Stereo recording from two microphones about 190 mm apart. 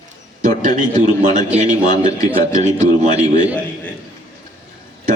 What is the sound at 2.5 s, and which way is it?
Speech, 40° right (ahead or behind).